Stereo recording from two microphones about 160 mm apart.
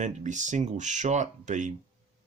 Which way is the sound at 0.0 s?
50° right (ahead or behind).